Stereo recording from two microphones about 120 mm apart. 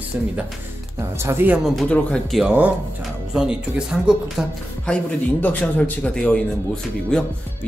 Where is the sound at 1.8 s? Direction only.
5° left (ahead or behind).